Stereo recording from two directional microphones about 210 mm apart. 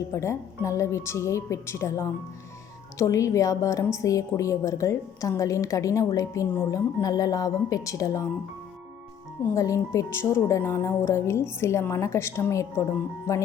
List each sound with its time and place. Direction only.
0.1 s a woman's voice: 15° left (ahead or behind)
9.6 s a woman's voice: 15° left (ahead or behind)